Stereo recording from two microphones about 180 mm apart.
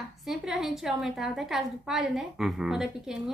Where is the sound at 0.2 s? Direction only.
Centre (ahead or behind).